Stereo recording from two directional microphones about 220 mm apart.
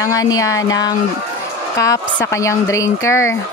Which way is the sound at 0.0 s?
15° left (ahead or behind).